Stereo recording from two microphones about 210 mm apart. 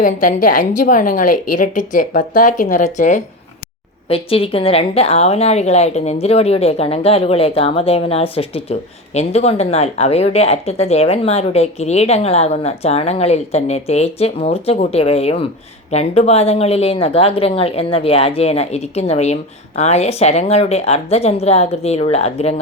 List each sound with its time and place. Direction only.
0.0 s a woman's voice: 40° left (ahead or behind)